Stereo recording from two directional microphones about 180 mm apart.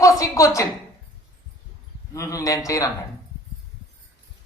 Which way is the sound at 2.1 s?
20° left (ahead or behind).